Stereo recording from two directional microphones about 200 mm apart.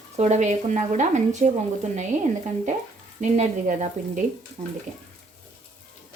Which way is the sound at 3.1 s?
35° right (ahead or behind).